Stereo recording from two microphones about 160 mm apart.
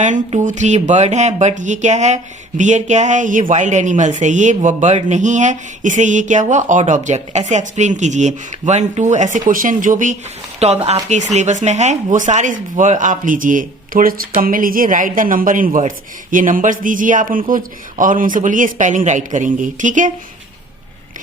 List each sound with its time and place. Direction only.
0.4 s speech: 50° right (ahead or behind)
10.6 s speech: 40° right (ahead or behind)